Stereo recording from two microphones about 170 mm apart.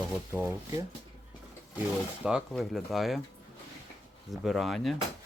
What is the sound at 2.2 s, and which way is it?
Speech, centre (ahead or behind).